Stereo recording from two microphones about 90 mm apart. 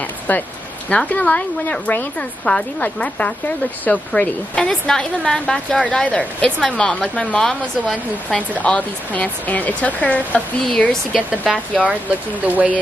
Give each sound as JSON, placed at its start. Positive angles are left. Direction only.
{"t": 0.3, "sound": "speech", "side_deg": 20}
{"t": 11.1, "sound": "a woman's voice", "side_deg": -10}